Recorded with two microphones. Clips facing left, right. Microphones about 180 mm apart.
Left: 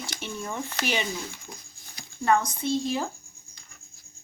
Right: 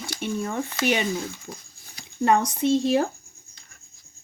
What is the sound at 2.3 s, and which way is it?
Speech, 70° right (ahead or behind).